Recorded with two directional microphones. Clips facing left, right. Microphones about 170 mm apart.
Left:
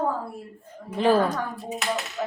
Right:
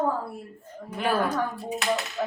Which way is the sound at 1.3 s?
5° right (ahead or behind).